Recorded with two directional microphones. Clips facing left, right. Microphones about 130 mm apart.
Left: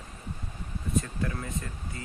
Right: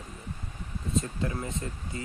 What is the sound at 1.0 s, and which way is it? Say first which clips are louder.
Speech: even; 25° right (ahead or behind).